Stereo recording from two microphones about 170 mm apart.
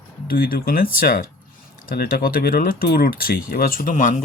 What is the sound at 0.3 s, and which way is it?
Speech, 60° left (ahead or behind).